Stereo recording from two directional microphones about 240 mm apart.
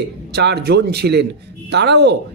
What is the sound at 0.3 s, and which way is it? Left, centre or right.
A man's voice, right.